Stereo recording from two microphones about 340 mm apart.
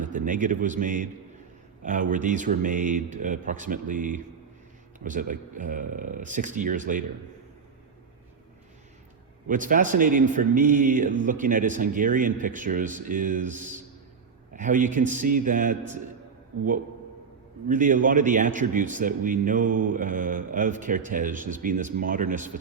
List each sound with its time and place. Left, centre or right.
0.0 s a man's voice: right
9.5 s a man's voice: right
17.7 s a man's voice: right